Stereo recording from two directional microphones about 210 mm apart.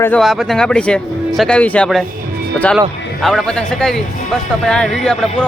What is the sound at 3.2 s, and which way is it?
Speech, centre (ahead or behind).